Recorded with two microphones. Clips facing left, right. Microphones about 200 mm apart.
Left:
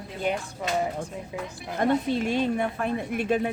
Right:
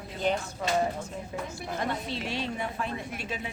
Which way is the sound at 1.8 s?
50° left (ahead or behind).